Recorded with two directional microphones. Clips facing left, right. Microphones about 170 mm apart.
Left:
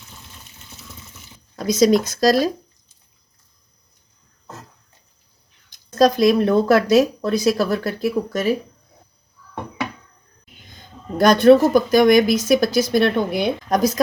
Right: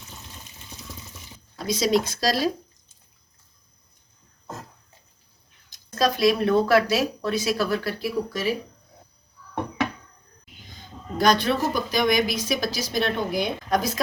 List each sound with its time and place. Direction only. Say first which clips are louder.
1.5 s speech: left 7 dB; 45° left (ahead or behind)
6.0 s speech: left 6 dB; 40° left (ahead or behind)
10.8 s speech: left 7 dB; 50° left (ahead or behind)
13.7 s speech: left 6 dB; 45° left (ahead or behind)